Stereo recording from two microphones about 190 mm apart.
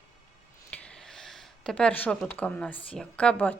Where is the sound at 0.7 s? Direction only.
5° left (ahead or behind).